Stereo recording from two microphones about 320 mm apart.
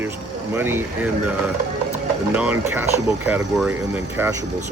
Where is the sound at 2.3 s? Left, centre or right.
Centre.